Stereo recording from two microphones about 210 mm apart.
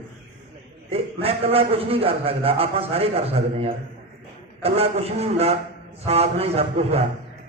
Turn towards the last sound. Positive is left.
turn(degrees=-30)  # may be behind; listen again after turning